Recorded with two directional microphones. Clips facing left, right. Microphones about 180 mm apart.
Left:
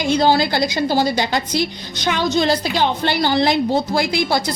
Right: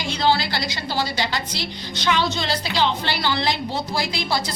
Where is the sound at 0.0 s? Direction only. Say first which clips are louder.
Left 6 dB; 45° left (ahead or behind).